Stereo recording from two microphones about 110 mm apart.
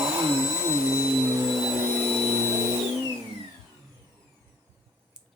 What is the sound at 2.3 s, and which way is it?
Vehicle, 25° right (ahead or behind).